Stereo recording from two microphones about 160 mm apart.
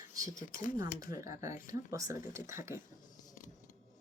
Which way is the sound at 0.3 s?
55° left (ahead or behind).